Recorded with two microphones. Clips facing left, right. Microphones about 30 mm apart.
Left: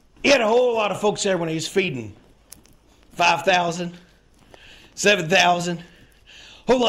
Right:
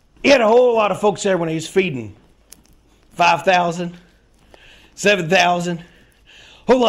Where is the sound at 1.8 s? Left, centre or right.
Centre.